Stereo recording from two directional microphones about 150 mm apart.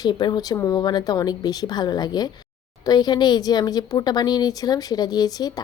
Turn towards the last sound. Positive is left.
turn(degrees=25)  # may be behind; listen again after turning